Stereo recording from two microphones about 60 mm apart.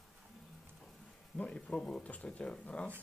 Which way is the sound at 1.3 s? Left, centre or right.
Centre.